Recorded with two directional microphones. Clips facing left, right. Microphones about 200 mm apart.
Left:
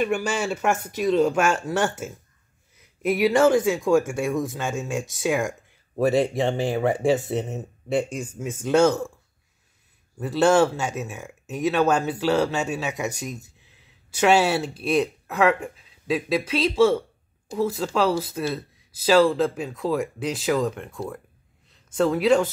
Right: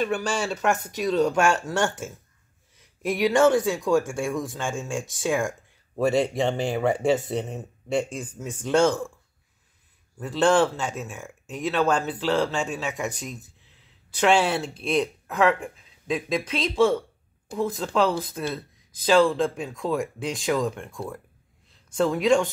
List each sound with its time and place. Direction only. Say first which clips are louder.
0.0 s speech: left 2 dB; 10° left (ahead or behind)
10.1 s speech: left 2 dB; 10° left (ahead or behind)